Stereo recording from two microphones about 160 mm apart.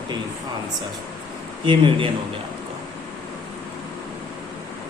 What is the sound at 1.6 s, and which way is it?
Speech, 30° right (ahead or behind).